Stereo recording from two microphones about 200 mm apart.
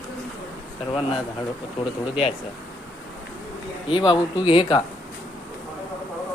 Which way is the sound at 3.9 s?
25° left (ahead or behind).